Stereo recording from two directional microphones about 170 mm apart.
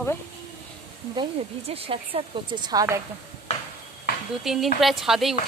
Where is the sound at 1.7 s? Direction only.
35° right (ahead or behind).